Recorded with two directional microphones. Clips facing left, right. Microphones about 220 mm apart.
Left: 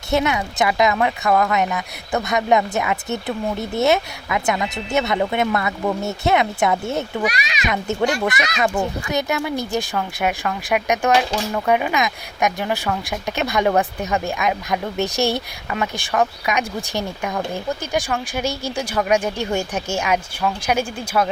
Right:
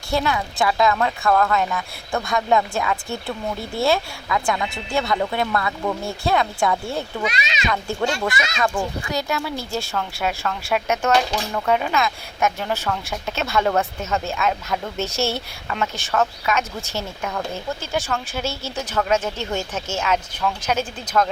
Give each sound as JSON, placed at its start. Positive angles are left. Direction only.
{"t": 0.1, "sound": "speech", "side_deg": 20}
{"t": 7.3, "sound": "speech", "side_deg": -25}
{"t": 8.2, "sound": "speech", "side_deg": 20}